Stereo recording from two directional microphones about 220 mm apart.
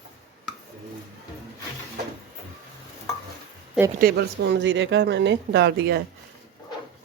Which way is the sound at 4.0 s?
45° right (ahead or behind).